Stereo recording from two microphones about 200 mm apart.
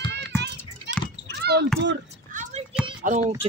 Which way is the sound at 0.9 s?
60° right (ahead or behind).